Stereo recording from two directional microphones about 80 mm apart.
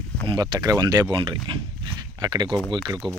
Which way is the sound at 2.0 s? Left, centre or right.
Right.